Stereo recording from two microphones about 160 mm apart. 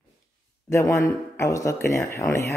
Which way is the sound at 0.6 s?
20° left (ahead or behind).